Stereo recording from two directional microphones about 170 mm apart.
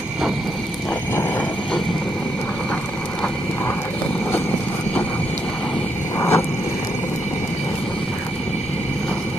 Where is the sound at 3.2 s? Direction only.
10° left (ahead or behind).